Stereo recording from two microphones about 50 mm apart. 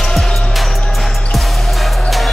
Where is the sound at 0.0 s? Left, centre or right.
Centre.